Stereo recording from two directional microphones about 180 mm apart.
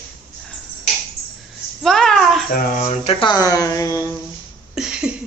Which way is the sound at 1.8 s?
Centre (ahead or behind).